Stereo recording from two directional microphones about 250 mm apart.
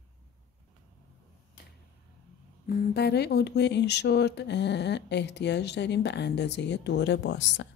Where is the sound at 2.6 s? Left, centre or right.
Left.